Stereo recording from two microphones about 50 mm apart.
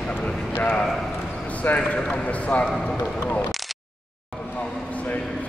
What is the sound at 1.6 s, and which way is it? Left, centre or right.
A man's voice, left.